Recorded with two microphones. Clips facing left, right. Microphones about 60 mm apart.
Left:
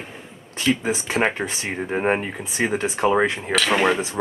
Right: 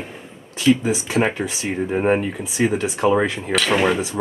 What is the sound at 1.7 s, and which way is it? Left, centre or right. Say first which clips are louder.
Speech: right 3 dB; centre.